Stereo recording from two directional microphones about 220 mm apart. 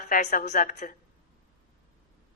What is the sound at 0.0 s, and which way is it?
Speech, 35° left (ahead or behind).